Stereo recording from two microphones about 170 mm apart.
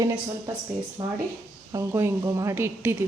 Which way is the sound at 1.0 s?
20° right (ahead or behind).